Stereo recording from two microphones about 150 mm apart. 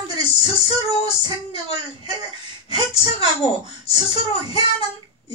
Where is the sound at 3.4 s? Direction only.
40° left (ahead or behind).